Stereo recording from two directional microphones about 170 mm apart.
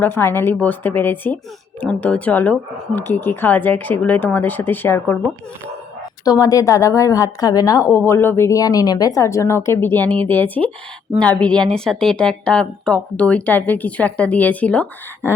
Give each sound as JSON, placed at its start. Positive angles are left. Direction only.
{"t": 0.0, "sound": "a woman's voice", "side_deg": 15}
{"t": 6.2, "sound": "a woman's voice", "side_deg": 20}